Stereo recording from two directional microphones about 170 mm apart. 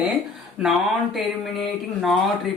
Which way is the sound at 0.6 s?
Centre (ahead or behind).